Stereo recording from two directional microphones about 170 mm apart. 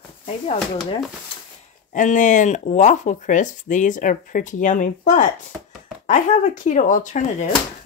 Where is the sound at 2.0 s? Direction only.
50° left (ahead or behind).